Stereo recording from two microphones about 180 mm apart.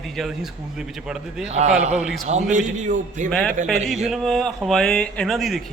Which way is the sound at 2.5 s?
45° right (ahead or behind).